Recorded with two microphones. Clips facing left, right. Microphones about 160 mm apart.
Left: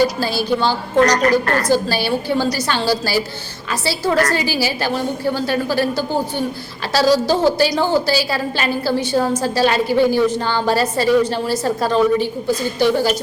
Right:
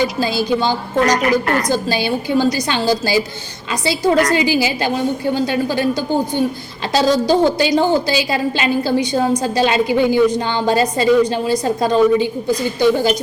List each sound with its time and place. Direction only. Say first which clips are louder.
0.2 s a woman's voice: right 1 dB; 15° right (ahead or behind)